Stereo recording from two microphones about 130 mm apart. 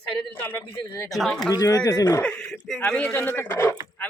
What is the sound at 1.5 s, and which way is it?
Speech, 30° left (ahead or behind).